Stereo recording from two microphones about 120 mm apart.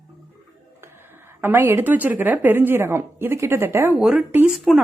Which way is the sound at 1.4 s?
15° right (ahead or behind).